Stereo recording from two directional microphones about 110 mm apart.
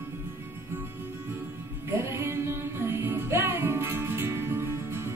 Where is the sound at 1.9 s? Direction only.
20° right (ahead or behind).